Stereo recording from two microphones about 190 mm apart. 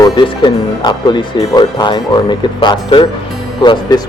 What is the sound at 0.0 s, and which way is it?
Speech, 20° left (ahead or behind).